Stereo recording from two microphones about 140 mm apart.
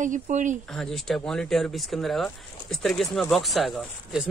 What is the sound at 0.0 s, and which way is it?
Speech, 65° right (ahead or behind).